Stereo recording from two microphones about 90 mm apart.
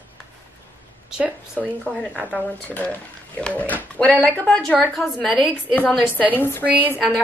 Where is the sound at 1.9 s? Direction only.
10° left (ahead or behind).